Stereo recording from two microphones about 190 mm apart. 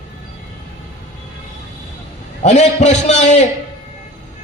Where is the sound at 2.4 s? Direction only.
35° left (ahead or behind).